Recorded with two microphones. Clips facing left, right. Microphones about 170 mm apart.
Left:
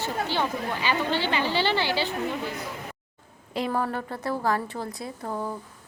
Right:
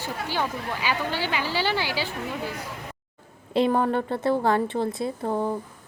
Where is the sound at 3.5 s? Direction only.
25° right (ahead or behind).